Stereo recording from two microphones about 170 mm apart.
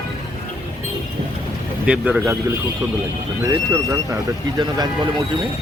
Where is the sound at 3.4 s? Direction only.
20° right (ahead or behind).